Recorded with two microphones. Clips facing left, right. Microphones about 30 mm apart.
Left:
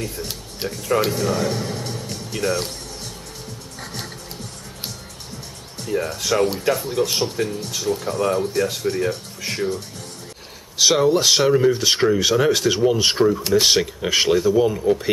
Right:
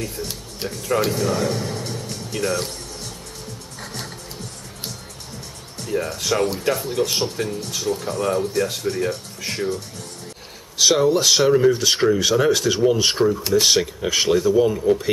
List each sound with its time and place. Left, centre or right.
0.0 s speech: centre
3.8 s music: centre
5.8 s speech: centre
10.8 s speech: centre